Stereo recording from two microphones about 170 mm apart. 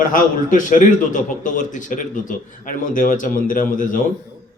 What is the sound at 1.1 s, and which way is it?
A man's voice, 50° left (ahead or behind).